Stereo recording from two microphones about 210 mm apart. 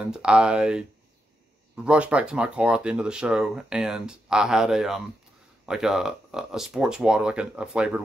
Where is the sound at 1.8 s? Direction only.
5° right (ahead or behind).